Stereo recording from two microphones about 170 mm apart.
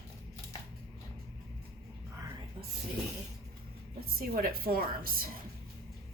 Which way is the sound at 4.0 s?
60° right (ahead or behind).